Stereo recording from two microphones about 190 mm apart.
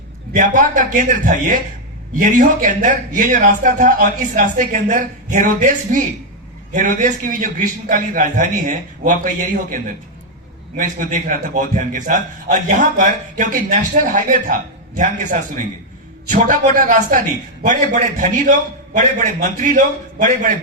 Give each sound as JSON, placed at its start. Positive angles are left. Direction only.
{"t": 0.3, "sound": "a man's voice", "side_deg": -45}